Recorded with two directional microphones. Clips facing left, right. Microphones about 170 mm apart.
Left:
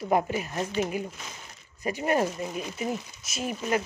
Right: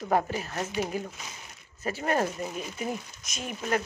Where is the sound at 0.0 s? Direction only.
15° left (ahead or behind).